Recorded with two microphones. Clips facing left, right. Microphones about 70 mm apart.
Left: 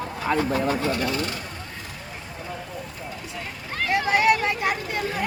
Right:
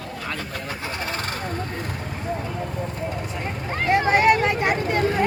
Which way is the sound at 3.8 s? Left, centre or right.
Right.